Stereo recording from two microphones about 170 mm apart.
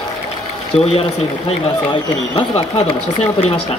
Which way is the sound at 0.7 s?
35° left (ahead or behind).